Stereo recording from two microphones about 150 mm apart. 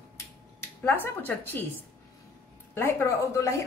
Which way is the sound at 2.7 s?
15° left (ahead or behind).